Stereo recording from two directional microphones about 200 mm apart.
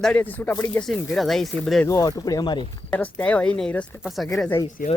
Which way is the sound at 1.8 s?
20° left (ahead or behind).